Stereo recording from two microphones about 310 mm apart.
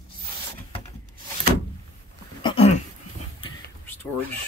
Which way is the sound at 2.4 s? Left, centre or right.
Centre.